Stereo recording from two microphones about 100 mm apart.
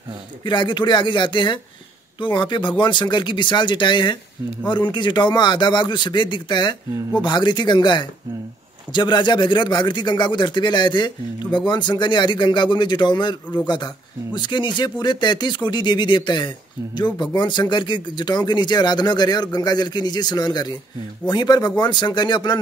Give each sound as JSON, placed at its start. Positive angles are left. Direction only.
{"t": 0.5, "sound": "a man's voice", "side_deg": 50}